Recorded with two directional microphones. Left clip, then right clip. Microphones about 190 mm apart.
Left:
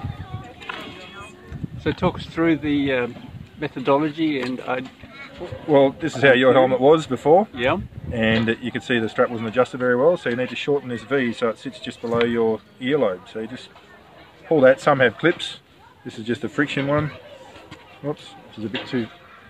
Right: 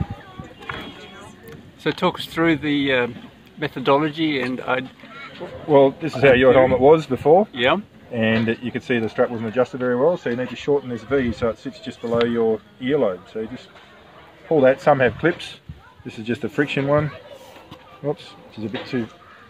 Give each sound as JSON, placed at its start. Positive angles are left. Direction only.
{"t": 1.8, "sound": "speech", "side_deg": -5}
{"t": 5.7, "sound": "speech", "side_deg": -15}
{"t": 7.5, "sound": "speech", "side_deg": -5}
{"t": 8.1, "sound": "speech", "side_deg": -15}
{"t": 14.5, "sound": "speech", "side_deg": -5}
{"t": 18.9, "sound": "speech", "side_deg": -10}